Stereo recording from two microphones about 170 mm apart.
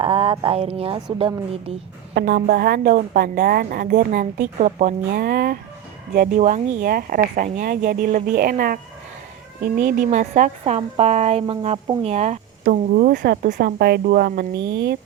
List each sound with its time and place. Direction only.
0.0 s speech: 35° right (ahead or behind)
2.1 s a woman's voice: 70° right (ahead or behind); by 4.9 s 45° right (ahead or behind)
5.1 s a woman's voice: 65° right (ahead or behind)
10.6 s speech: 30° right (ahead or behind)
12.9 s a woman's voice: 55° right (ahead or behind); by 14.9 s 75° right (ahead or behind)